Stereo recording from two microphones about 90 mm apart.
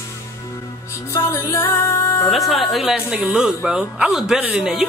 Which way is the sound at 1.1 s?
35° left (ahead or behind).